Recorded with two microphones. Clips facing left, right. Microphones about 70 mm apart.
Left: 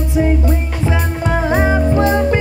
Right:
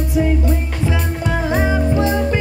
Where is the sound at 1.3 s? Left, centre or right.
Left.